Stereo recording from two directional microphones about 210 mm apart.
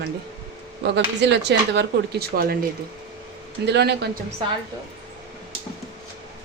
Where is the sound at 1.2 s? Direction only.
55° right (ahead or behind).